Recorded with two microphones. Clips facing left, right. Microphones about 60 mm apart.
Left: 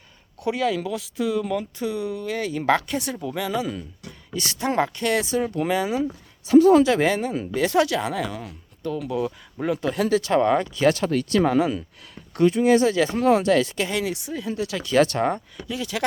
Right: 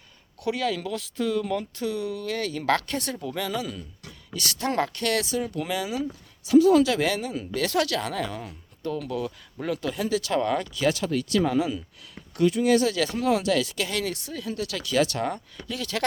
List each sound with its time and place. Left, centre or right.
0.4 s speech: centre
5.3 s speech: left
7.5 s speech: left
8.2 s speech: centre
9.0 s speech: left
9.9 s speech: left
10.2 s speech: left
10.8 s speech: left
12.4 s speech: left
13.9 s speech: centre
14.9 s speech: left
15.5 s speech: centre